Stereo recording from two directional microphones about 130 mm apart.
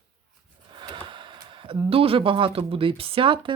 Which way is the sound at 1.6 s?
45° right (ahead or behind).